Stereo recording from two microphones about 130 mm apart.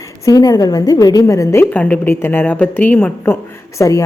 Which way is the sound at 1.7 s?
10° left (ahead or behind).